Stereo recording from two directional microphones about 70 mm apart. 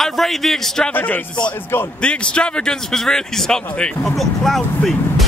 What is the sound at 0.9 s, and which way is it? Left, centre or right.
Speech, left.